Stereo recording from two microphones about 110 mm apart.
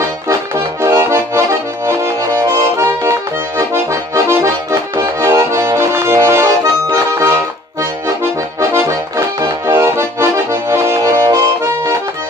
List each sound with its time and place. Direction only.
0.8 s accordion: 25° right (ahead or behind)